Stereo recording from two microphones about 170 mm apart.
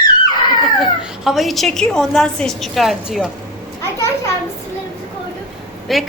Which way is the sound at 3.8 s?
15° left (ahead or behind).